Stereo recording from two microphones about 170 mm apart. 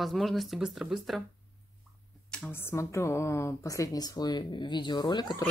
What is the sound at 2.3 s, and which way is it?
A woman's voice, 10° left (ahead or behind).